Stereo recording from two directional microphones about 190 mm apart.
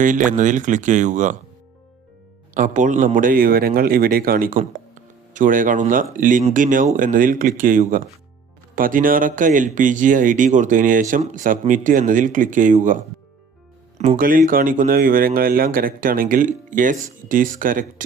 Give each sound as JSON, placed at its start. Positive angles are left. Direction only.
{"t": 0.0, "sound": "speech", "side_deg": -45}
{"t": 2.6, "sound": "speech", "side_deg": -45}
{"t": 14.2, "sound": "speech", "side_deg": -45}